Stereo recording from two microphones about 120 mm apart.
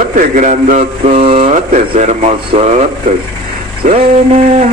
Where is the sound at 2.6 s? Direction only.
70° right (ahead or behind).